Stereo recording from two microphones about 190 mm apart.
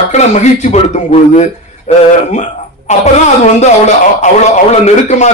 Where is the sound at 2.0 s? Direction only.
35° left (ahead or behind).